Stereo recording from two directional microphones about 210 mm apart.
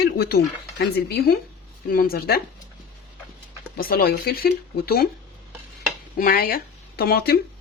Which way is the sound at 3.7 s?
45° left (ahead or behind).